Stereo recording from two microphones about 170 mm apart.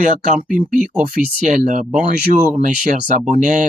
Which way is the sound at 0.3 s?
5° right (ahead or behind).